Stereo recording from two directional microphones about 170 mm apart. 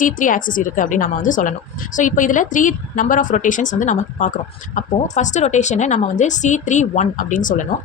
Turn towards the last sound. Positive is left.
turn(degrees=50)  # may be behind; listen again after turning